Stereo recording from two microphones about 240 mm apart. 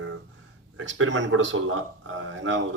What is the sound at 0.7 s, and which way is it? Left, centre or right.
Speech, right.